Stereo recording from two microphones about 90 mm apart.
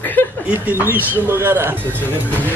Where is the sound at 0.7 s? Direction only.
25° right (ahead or behind).